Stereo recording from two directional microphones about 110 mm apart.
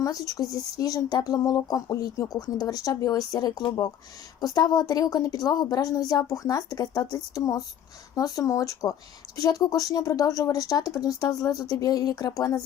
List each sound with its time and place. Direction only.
0.0 s speech: 30° left (ahead or behind)